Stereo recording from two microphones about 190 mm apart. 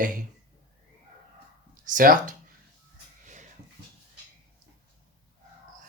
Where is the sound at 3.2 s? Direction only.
40° right (ahead or behind).